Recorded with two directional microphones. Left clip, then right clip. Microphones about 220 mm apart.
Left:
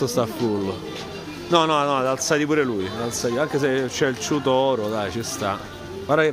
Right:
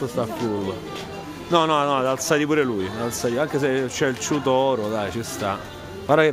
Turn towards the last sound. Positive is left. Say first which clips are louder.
# right 2 dB
turn(degrees=-15)  # may be behind; listen again after turning